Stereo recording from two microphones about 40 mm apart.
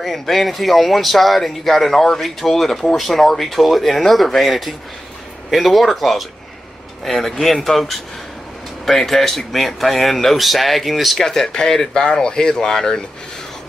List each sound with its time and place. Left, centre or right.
0.0 s speech: centre
11.1 s speech: centre